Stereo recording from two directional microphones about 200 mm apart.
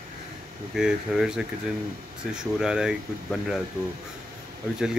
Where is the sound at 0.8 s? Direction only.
5° right (ahead or behind).